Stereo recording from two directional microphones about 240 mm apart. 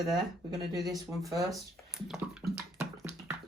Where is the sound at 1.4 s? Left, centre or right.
Centre.